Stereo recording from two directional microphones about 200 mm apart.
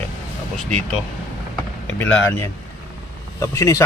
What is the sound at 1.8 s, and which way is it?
Speech, 10° left (ahead or behind).